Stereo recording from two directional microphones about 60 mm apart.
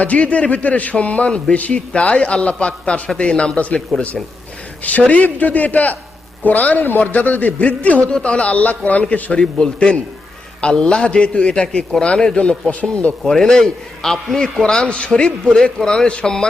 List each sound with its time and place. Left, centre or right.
0.0 s a man's voice: left
4.8 s a man's voice: left
9.4 s a man's voice: centre
13.3 s a man's voice: centre